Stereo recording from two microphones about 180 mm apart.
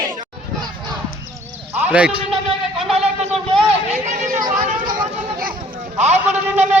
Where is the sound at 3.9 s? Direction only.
40° right (ahead or behind).